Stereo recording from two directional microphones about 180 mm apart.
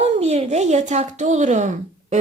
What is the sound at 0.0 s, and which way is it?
Speech, 35° right (ahead or behind).